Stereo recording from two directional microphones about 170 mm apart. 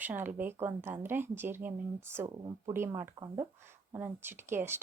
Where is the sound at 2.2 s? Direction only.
25° right (ahead or behind).